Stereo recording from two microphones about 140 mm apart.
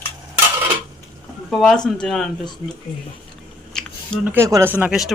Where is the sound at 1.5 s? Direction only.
5° left (ahead or behind).